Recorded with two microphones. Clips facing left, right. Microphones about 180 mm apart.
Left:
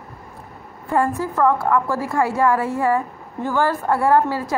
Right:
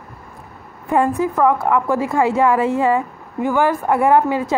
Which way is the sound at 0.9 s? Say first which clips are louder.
Right 3 dB; 20° right (ahead or behind).